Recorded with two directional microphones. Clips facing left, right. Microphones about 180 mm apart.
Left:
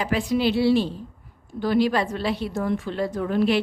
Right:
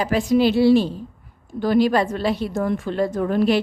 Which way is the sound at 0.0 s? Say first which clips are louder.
Right 5 dB; 40° right (ahead or behind).